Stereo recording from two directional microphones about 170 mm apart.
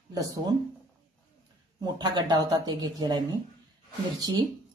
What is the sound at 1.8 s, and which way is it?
Speech, 25° right (ahead or behind).